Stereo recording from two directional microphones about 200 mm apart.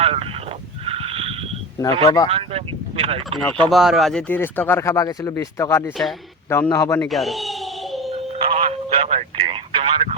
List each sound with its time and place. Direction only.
0.0 s a sound: 30° right (ahead or behind)
2.0 s speech: 30° left (ahead or behind)
2.3 s speech: 30° right (ahead or behind)
3.7 s speech: centre (ahead or behind); by 7.1 s 15° left (ahead or behind)
7.1 s a sound: centre (ahead or behind)
8.1 s telephone: 30° right (ahead or behind)